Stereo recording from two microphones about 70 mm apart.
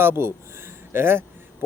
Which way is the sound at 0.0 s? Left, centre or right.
Right.